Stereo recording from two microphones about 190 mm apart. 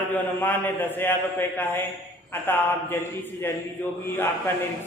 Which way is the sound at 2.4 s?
10° left (ahead or behind).